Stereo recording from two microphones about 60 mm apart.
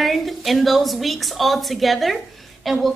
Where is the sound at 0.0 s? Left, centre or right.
Centre.